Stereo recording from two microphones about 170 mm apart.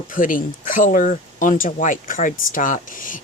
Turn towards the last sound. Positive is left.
turn(degrees=50)  # may be behind; listen again after turning